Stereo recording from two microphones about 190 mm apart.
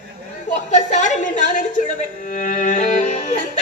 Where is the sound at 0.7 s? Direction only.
40° left (ahead or behind).